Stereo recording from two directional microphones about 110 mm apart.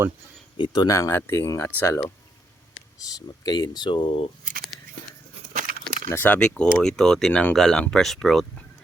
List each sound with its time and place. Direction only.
0.5 s speech: 45° left (ahead or behind)
0.9 s speech: 25° left (ahead or behind)
3.0 s speech: 35° left (ahead or behind); by 4.3 s 50° left (ahead or behind)
6.1 s speech: 20° left (ahead or behind)